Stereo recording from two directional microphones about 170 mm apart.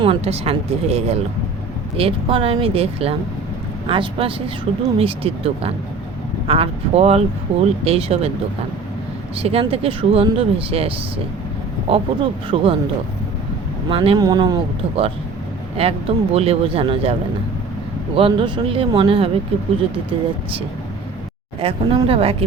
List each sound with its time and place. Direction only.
0.0 s speech: 35° right (ahead or behind)
9.3 s speech: 35° right (ahead or behind)
13.9 s speech: 35° right (ahead or behind)
14.2 s speech: 25° right (ahead or behind)
15.8 s speech: 35° right (ahead or behind)